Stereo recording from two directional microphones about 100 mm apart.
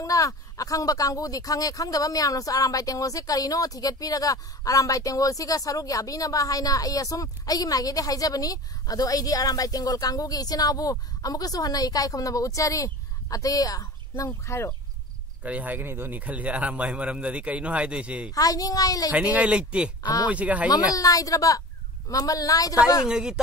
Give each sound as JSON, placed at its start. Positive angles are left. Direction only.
{"t": 0.0, "sound": "speech", "side_deg": 35}
{"t": 15.4, "sound": "a man's voice", "side_deg": -15}
{"t": 18.3, "sound": "speech", "side_deg": 35}
{"t": 19.1, "sound": "a man's voice", "side_deg": -15}
{"t": 20.7, "sound": "speech", "side_deg": 35}
{"t": 23.0, "sound": "a man's voice", "side_deg": -5}